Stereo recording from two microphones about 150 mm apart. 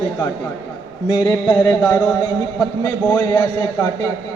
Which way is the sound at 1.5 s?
10° left (ahead or behind).